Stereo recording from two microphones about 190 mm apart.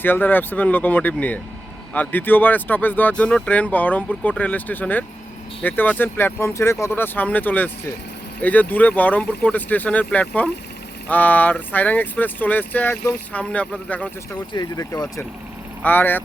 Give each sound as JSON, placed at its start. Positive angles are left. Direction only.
{"t": 0.0, "sound": "speech", "side_deg": 10}
{"t": 14.3, "sound": "speech", "side_deg": 20}
{"t": 15.8, "sound": "speech", "side_deg": 10}